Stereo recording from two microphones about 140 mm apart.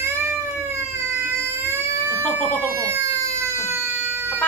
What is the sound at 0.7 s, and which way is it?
Baby cry, 20° right (ahead or behind).